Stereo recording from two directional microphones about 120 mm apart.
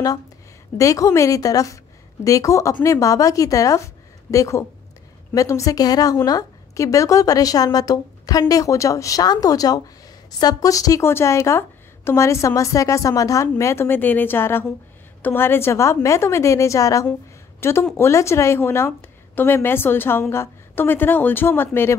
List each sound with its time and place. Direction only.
0.7 s a woman's voice: 25° left (ahead or behind)